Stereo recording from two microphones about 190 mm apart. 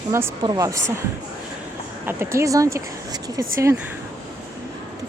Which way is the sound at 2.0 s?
15° right (ahead or behind).